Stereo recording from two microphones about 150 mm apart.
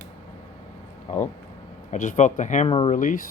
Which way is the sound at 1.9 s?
55° left (ahead or behind).